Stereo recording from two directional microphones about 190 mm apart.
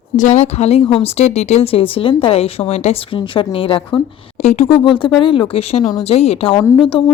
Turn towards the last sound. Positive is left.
turn(degrees=25)  # may be behind; listen again after turning